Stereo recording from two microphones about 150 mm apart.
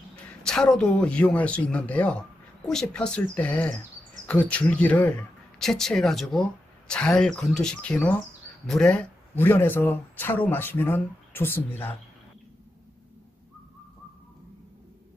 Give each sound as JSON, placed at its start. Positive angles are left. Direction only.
{"t": 0.4, "sound": "speech", "side_deg": 5}